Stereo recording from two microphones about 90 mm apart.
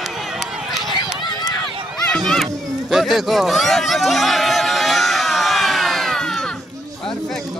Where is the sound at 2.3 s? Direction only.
Centre (ahead or behind).